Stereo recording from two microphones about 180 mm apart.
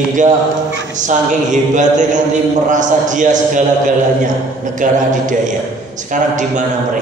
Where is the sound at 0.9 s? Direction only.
45° right (ahead or behind).